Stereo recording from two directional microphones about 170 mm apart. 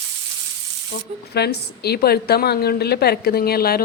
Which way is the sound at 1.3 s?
75° left (ahead or behind).